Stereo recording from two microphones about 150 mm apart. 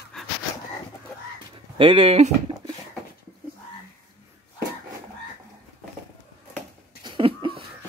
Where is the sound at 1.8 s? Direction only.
40° right (ahead or behind).